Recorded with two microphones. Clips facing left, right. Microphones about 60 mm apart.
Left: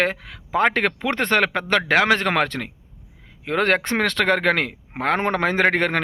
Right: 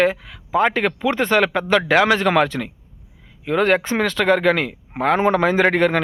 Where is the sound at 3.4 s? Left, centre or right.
Left.